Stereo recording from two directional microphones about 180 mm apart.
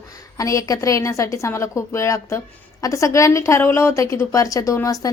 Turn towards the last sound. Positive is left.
turn(degrees=20)  # may be behind; listen again after turning